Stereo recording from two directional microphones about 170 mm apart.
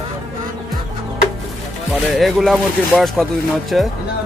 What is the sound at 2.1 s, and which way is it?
Speech, centre (ahead or behind).